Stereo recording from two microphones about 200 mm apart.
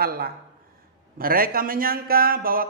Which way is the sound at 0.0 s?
50° right (ahead or behind).